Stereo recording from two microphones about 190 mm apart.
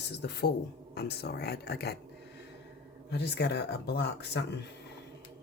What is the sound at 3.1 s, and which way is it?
Speech, 60° left (ahead or behind).